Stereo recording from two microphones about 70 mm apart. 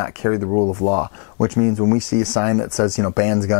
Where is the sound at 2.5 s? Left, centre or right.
Left.